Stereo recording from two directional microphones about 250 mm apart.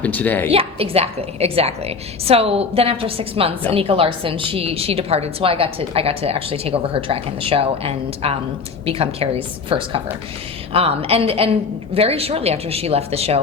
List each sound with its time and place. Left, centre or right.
0.0 s a woman's voice: centre
0.4 s a woman's voice: right